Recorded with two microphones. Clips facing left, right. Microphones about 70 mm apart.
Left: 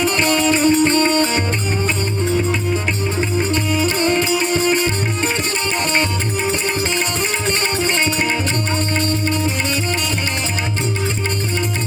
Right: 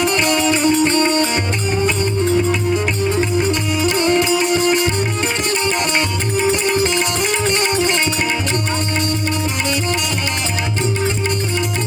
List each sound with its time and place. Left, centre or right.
0.0 s music: left
3.8 s music: left
6.5 s music: left